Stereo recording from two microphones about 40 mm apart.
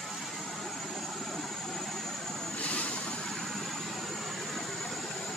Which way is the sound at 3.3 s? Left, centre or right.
Centre.